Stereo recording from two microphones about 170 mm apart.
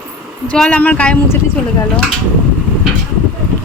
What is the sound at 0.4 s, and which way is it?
Speech, 5° left (ahead or behind).